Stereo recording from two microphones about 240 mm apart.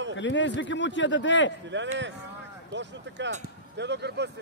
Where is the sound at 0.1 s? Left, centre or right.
Left.